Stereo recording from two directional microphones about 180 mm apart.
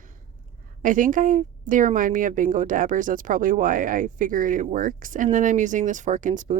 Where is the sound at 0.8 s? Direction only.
45° right (ahead or behind).